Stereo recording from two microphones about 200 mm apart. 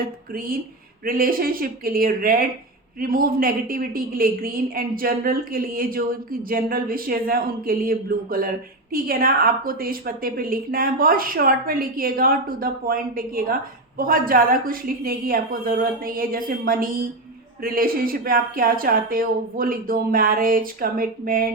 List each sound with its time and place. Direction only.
0.3 s a woman's voice: 45° right (ahead or behind)